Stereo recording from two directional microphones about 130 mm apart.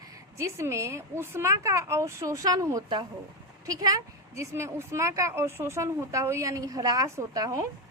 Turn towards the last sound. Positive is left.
turn(degrees=-30)  # may be behind; listen again after turning